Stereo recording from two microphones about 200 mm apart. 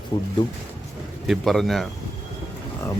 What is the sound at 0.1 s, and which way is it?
Speech, 20° left (ahead or behind).